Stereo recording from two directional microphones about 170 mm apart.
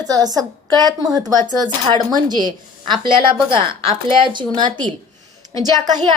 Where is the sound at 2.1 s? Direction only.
25° right (ahead or behind).